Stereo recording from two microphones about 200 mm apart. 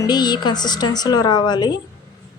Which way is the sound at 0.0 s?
20° left (ahead or behind).